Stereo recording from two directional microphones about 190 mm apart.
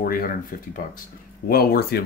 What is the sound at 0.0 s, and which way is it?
Speech, 50° left (ahead or behind).